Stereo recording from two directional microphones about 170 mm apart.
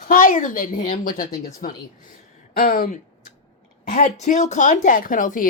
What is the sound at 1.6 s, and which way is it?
A woman's voice, 65° left (ahead or behind).